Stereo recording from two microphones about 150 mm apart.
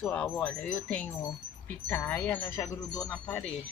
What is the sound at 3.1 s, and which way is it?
Speech, 5° left (ahead or behind).